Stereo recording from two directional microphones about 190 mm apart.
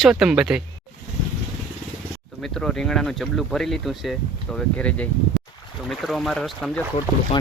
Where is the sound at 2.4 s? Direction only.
Centre (ahead or behind).